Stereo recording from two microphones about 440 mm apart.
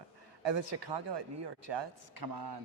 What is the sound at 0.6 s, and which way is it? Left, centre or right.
A man's voice, right.